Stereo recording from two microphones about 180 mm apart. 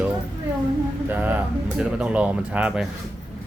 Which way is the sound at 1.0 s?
10° right (ahead or behind).